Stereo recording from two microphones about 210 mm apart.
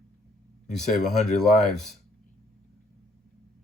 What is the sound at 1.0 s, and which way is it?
Speech, centre (ahead or behind).